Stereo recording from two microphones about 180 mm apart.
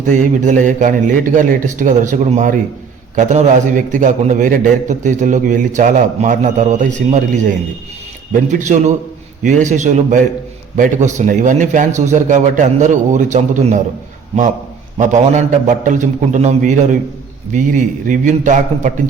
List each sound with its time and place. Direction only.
0.2 s a man's voice: 45° right (ahead or behind)
14.9 s a man's voice: 40° right (ahead or behind)